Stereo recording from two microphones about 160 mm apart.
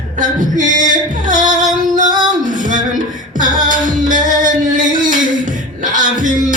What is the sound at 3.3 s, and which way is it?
Music, 55° right (ahead or behind).